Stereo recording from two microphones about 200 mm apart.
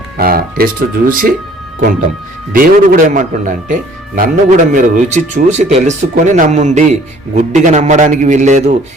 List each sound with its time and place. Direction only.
0.2 s speech: 50° right (ahead or behind)
2.5 s a man's voice: 45° right (ahead or behind)